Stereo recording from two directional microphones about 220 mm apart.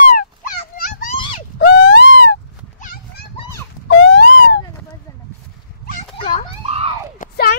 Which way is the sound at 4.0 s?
55° left (ahead or behind).